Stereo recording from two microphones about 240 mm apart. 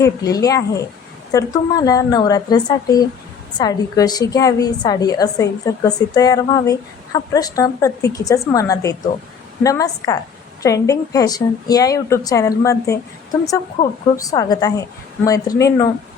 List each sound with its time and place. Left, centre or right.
0.0 s a woman's voice: centre